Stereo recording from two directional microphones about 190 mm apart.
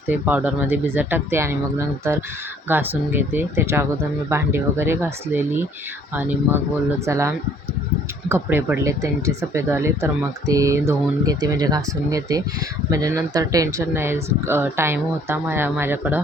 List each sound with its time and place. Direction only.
0.1 s speech: 10° right (ahead or behind)